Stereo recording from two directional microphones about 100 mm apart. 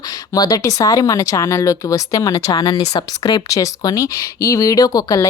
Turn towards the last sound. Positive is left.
turn(degrees=35)  # may be behind; listen again after turning